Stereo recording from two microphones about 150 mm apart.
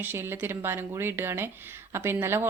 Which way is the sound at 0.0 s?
15° right (ahead or behind).